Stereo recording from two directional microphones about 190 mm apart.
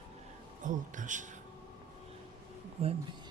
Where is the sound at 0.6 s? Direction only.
40° right (ahead or behind).